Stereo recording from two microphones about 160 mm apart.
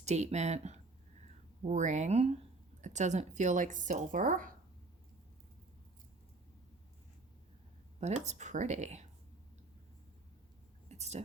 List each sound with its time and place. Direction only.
0.0 s speech: 45° right (ahead or behind)
8.0 s speech: 45° right (ahead or behind)
10.8 s a sound: 45° right (ahead or behind)